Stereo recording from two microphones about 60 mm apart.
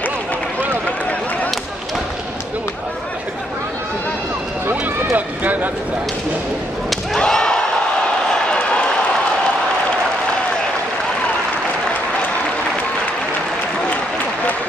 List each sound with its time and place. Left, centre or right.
5.1 s run: right
7.2 s slam: centre
8.3 s a sound: centre